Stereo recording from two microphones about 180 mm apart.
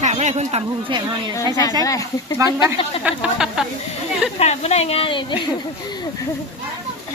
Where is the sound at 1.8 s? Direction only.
20° left (ahead or behind).